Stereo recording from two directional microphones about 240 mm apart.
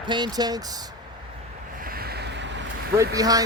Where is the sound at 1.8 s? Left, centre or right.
Right.